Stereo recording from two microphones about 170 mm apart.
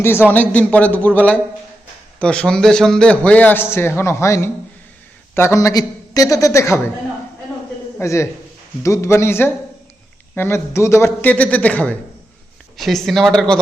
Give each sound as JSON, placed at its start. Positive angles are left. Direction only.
{"t": 0.0, "sound": "a man's voice", "side_deg": 15}
{"t": 7.9, "sound": "a man's voice", "side_deg": 15}